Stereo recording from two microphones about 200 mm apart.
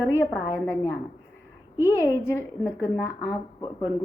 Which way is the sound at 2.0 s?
15° left (ahead or behind).